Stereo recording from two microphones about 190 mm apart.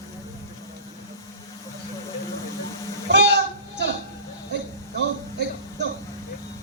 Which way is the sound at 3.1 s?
60° right (ahead or behind).